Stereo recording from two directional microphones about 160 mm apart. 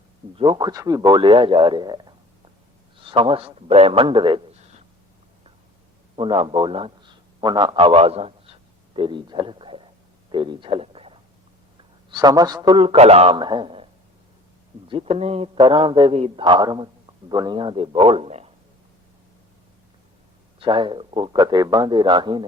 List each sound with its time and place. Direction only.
0.3 s a man's voice: 30° right (ahead or behind)
6.1 s a man's voice: 30° right (ahead or behind)
12.1 s a man's voice: 25° right (ahead or behind)
14.8 s a man's voice: 35° right (ahead or behind)
20.6 s speech: 30° right (ahead or behind)